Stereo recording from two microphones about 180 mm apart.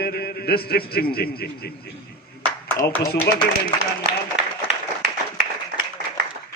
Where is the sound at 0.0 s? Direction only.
60° left (ahead or behind).